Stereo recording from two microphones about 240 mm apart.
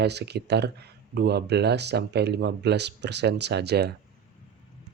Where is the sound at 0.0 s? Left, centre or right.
Right.